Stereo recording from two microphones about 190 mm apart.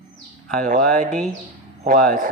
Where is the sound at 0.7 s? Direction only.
40° right (ahead or behind).